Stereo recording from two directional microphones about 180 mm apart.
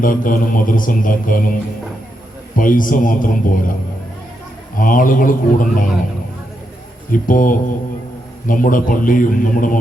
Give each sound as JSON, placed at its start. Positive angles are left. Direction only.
{"t": 0.0, "sound": "mantra", "side_deg": 50}
{"t": 2.6, "sound": "mantra", "side_deg": 50}
{"t": 4.8, "sound": "mantra", "side_deg": 50}
{"t": 7.1, "sound": "mantra", "side_deg": 50}